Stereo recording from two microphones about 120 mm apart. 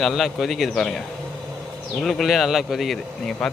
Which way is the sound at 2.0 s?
Centre (ahead or behind).